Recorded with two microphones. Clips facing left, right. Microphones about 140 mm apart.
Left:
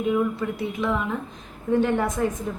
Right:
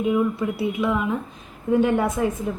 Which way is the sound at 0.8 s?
10° right (ahead or behind).